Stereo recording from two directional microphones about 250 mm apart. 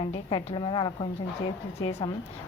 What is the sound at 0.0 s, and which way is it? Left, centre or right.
Speech, centre.